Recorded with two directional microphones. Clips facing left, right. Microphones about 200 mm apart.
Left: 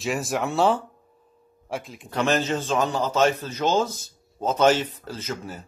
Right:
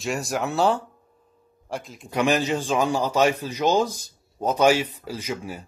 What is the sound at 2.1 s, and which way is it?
Speech, 15° right (ahead or behind).